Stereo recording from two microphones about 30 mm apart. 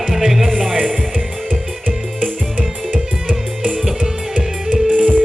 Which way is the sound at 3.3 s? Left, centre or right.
Right.